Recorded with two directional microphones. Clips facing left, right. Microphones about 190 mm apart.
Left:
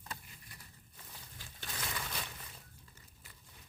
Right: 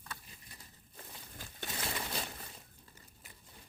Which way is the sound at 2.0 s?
30° right (ahead or behind).